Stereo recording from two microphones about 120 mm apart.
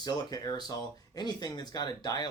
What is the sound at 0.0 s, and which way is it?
Speech, 35° left (ahead or behind).